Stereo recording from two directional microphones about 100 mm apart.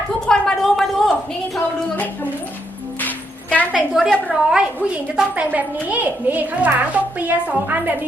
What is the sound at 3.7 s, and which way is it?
A child's voice, 5° right (ahead or behind).